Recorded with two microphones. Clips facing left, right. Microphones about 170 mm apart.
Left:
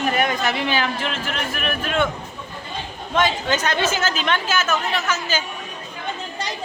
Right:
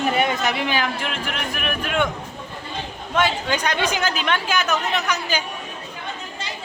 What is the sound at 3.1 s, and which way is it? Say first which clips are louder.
A woman's voice: left 1 dB; 10° right (ahead or behind).